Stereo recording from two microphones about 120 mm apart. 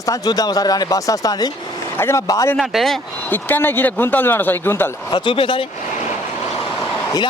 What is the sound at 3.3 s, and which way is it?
Speech, 15° left (ahead or behind).